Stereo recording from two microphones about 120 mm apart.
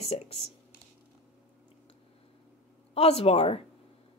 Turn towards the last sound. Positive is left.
turn(degrees=55)  # may be behind; listen again after turning